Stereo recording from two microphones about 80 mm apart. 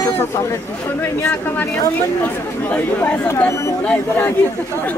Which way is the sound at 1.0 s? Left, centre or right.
Left.